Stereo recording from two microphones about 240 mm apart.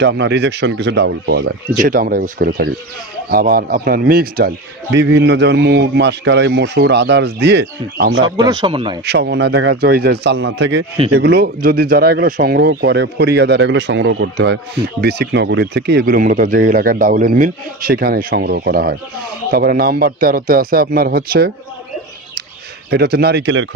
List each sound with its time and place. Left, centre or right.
0.0 s a man's voice: right
8.4 s speech: centre
9.0 s a man's voice: right
22.8 s a man's voice: right